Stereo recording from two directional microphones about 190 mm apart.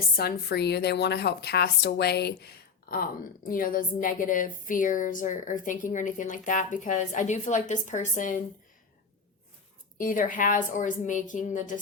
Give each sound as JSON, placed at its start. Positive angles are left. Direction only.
{"t": 0.2, "sound": "a woman's voice", "side_deg": 55}
{"t": 3.5, "sound": "a woman's voice", "side_deg": 45}
{"t": 10.0, "sound": "a woman's voice", "side_deg": 45}